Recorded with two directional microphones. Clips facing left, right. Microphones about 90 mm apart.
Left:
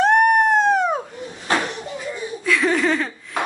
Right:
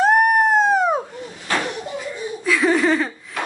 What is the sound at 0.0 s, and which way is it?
Dog, 5° right (ahead or behind).